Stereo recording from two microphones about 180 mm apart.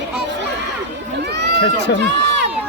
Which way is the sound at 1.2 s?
70° right (ahead or behind).